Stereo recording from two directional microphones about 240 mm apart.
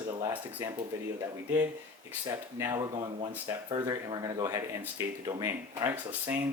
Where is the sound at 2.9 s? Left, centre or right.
Right.